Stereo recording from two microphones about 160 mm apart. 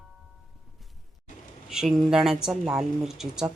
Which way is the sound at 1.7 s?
5° right (ahead or behind).